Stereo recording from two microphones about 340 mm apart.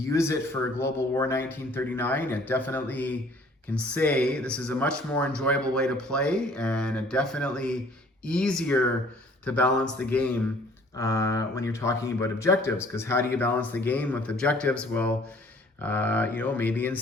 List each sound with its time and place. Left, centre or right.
0.0 s speech: centre